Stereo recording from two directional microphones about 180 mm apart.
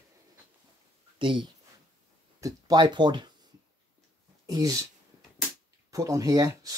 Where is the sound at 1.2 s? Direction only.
30° right (ahead or behind).